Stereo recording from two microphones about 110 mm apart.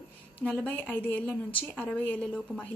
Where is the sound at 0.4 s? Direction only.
10° left (ahead or behind).